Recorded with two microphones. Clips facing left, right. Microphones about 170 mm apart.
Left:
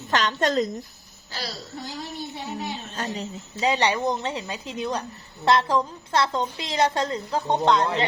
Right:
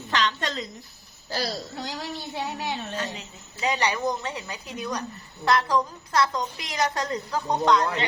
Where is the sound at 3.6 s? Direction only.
25° left (ahead or behind).